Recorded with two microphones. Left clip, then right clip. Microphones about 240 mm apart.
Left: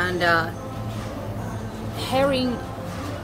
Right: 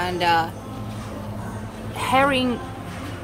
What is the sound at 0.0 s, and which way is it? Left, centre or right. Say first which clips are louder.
Speech: right 1 dB; centre.